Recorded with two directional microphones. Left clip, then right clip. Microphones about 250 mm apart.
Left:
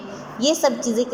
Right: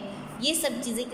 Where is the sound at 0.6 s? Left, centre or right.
Centre.